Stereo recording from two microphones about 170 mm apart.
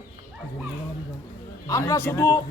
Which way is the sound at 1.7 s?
15° left (ahead or behind).